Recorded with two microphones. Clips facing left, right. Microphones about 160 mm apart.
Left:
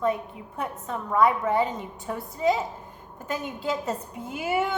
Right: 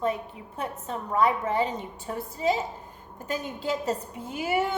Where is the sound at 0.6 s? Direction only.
30° right (ahead or behind).